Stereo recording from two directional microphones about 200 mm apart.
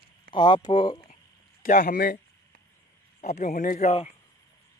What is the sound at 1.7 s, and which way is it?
Speech, 40° left (ahead or behind).